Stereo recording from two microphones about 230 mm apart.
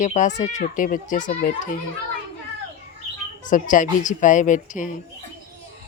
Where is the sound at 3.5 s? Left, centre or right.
Left.